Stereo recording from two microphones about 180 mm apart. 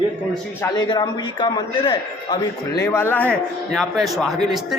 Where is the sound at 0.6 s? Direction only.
25° left (ahead or behind).